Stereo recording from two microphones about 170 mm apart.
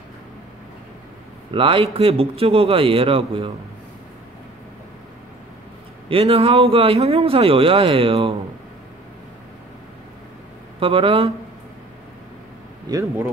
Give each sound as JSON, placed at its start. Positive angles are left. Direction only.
{"t": 1.5, "sound": "a man's voice", "side_deg": -30}
{"t": 6.0, "sound": "a man's voice", "side_deg": -35}
{"t": 10.8, "sound": "a man's voice", "side_deg": -30}